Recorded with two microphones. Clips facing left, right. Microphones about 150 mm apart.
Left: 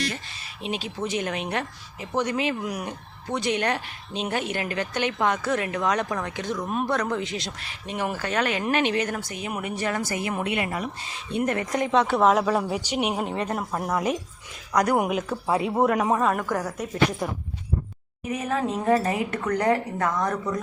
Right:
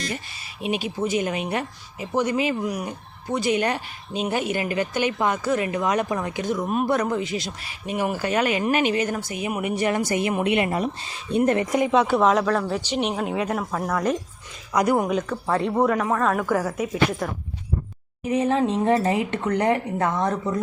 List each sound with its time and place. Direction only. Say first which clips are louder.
0.6 s speech: right 4 dB; 10° right (ahead or behind); by 11.1 s 25° right (ahead or behind)
11.3 s speech: right 5 dB; 40° right (ahead or behind)
11.7 s speech: right 3 dB; 5° right (ahead or behind); by 13.2 s 10° left (ahead or behind)
13.2 s speech: right 3 dB; 5° right (ahead or behind)
13.6 s speech: right 1 dB; 5° left (ahead or behind)
14.7 s speech: right 2 dB; 5° right (ahead or behind)
14.9 s speech: right 1 dB; 10° left (ahead or behind)
18.3 s speech: right 5 dB; 30° right (ahead or behind)